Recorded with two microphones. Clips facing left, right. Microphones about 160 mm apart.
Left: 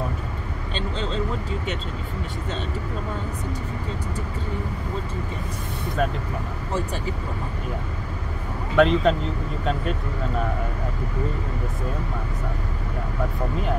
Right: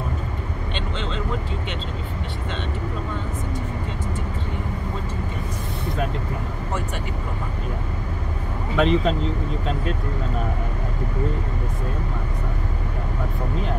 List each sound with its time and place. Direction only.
0.7 s speech: 35° left (ahead or behind)
8.7 s speech: centre (ahead or behind)